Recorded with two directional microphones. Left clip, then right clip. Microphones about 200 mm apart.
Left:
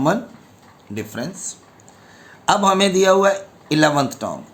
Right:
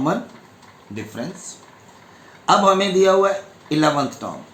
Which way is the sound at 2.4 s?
55° left (ahead or behind).